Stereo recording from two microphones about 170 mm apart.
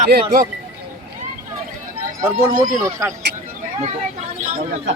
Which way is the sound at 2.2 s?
15° right (ahead or behind).